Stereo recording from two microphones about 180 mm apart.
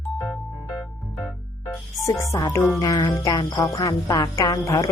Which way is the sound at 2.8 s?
20° left (ahead or behind).